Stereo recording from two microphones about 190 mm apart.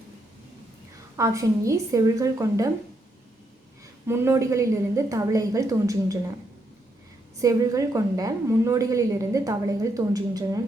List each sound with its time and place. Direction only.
1.1 s a woman's voice: 15° right (ahead or behind)
4.0 s a woman's voice: 15° right (ahead or behind)
7.4 s a woman's voice: 15° right (ahead or behind)